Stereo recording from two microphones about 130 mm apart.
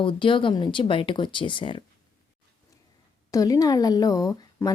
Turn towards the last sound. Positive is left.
turn(degrees=25)  # may be behind; listen again after turning